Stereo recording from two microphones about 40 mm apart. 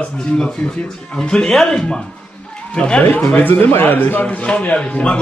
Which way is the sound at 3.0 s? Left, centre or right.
Left.